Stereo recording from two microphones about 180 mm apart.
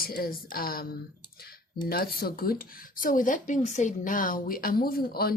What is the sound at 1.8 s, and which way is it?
Speech, 55° left (ahead or behind).